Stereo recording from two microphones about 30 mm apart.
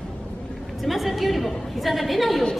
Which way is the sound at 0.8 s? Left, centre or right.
Centre.